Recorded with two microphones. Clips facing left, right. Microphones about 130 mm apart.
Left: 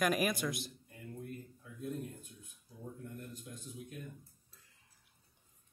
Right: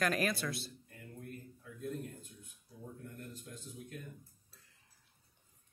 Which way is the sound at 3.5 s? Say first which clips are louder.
Even; 15° left (ahead or behind).